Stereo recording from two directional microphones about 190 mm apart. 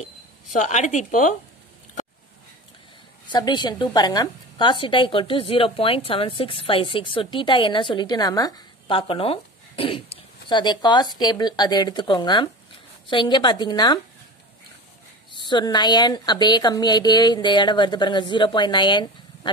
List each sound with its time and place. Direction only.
0.0 s speech: 40° left (ahead or behind)
3.3 s a woman's voice: 25° left (ahead or behind)
15.4 s a woman's voice: 25° left (ahead or behind)